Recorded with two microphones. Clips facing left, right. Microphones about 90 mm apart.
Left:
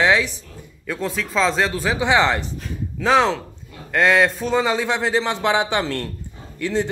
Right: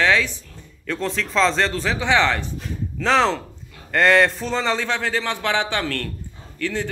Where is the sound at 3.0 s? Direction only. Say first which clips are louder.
Left 1 dB; 5° left (ahead or behind).